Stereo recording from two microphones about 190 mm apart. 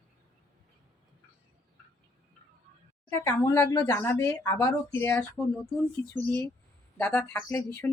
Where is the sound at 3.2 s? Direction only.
10° left (ahead or behind).